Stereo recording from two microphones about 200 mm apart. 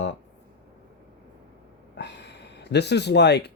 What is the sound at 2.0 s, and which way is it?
Speech, 60° left (ahead or behind).